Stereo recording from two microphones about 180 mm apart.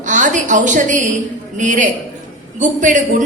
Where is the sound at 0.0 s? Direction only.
45° right (ahead or behind).